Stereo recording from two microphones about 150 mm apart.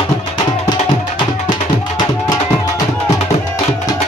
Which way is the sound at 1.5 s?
30° left (ahead or behind).